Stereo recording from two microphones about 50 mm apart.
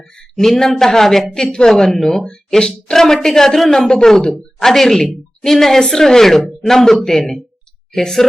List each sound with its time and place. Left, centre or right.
0.2 s a woman's voice: centre